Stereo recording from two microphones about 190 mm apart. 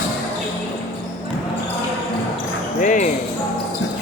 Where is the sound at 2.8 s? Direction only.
45° left (ahead or behind).